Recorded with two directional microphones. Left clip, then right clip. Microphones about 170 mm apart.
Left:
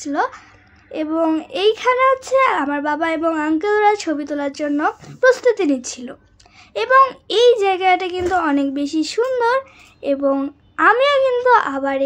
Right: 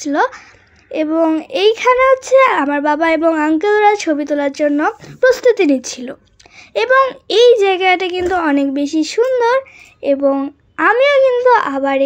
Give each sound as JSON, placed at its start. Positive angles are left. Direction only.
{"t": 0.0, "sound": "a child's voice", "side_deg": -30}